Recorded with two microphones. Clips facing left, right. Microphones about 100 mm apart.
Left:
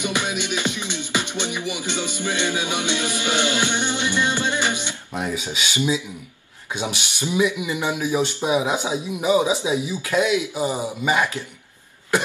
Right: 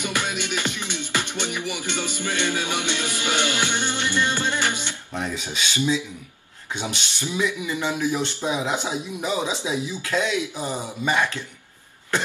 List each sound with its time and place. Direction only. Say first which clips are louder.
0.0 s music: left 2 dB; 15° left (ahead or behind)
6.7 s speech: left 2 dB; 10° left (ahead or behind)